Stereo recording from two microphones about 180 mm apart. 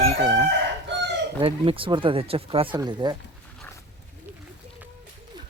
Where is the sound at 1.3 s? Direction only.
30° right (ahead or behind).